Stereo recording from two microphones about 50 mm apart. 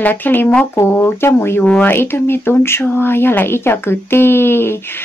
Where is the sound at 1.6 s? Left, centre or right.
Left.